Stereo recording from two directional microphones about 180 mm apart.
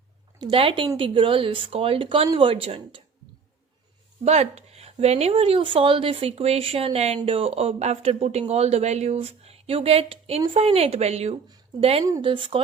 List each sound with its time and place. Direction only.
0.3 s speech: 25° right (ahead or behind)
4.3 s speech: 35° right (ahead or behind)